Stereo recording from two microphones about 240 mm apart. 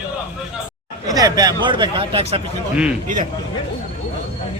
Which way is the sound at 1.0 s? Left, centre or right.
Centre.